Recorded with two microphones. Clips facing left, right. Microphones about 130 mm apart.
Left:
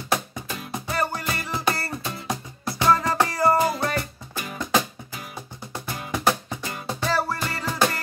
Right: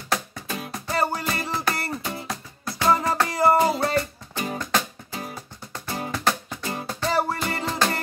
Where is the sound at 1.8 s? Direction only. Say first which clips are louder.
Right 2 dB; 20° right (ahead or behind).